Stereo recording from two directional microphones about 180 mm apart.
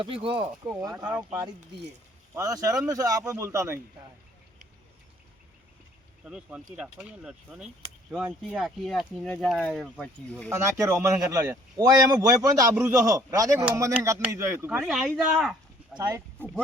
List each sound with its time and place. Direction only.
0.0 s speech: 30° right (ahead or behind)
0.7 s speech: 5° right (ahead or behind)
2.3 s a man's voice: 20° right (ahead or behind)
6.2 s speech: 5° right (ahead or behind)
10.5 s a man's voice: 15° right (ahead or behind)
14.8 s speech: centre (ahead or behind)
16.0 s speech: 20° right (ahead or behind)